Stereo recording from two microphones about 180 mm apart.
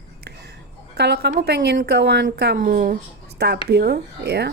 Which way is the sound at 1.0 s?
65° right (ahead or behind).